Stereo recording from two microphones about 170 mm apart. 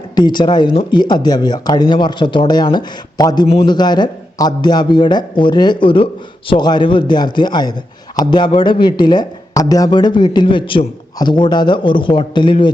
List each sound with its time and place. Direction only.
0.2 s a man's voice: 25° left (ahead or behind)